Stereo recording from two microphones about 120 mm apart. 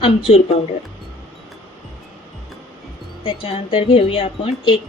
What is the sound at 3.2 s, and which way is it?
A woman's voice, 45° left (ahead or behind).